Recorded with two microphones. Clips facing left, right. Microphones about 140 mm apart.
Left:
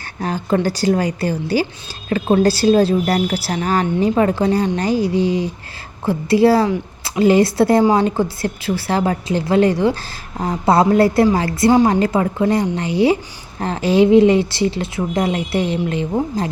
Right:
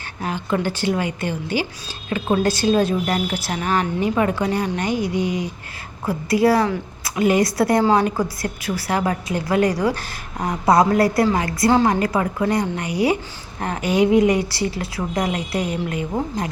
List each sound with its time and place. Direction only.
0.2 s a woman's voice: 40° left (ahead or behind)